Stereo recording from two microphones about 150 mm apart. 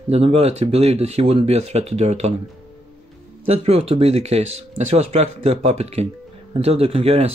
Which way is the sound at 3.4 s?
40° right (ahead or behind).